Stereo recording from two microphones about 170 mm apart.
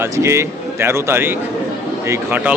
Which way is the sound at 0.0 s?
15° right (ahead or behind).